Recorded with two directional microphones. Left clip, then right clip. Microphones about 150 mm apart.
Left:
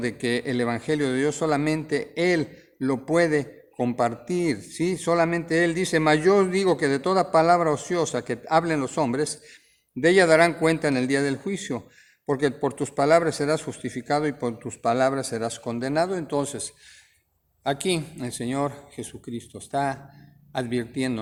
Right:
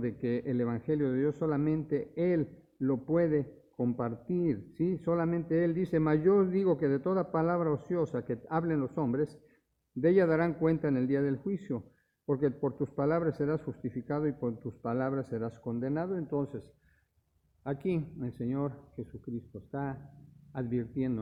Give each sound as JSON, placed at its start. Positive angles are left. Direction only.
{"t": 0.0, "sound": "a man's voice", "side_deg": 15}
{"t": 2.8, "sound": "a man's voice", "side_deg": 25}
{"t": 13.0, "sound": "a man's voice", "side_deg": 10}
{"t": 13.7, "sound": "speech", "side_deg": 25}
{"t": 14.1, "sound": "a man's voice", "side_deg": 15}
{"t": 15.6, "sound": "a woman's voice", "side_deg": 25}
{"t": 19.7, "sound": "speech", "side_deg": 20}